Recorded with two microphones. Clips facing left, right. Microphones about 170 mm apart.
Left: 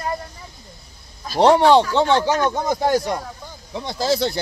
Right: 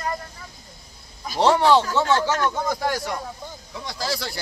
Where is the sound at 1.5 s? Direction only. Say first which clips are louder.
Left 4 dB; 20° left (ahead or behind).